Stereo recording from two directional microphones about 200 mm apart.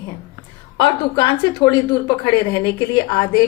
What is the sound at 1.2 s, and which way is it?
A woman's voice, 20° left (ahead or behind).